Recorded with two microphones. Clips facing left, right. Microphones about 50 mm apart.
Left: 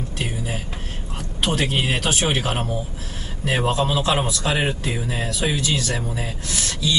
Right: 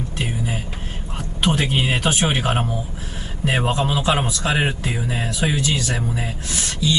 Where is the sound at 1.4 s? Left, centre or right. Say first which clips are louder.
Right 2 dB; centre.